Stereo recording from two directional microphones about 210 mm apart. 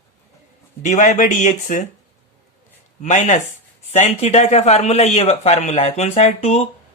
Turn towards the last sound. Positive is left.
turn(degrees=30)  # may be behind; listen again after turning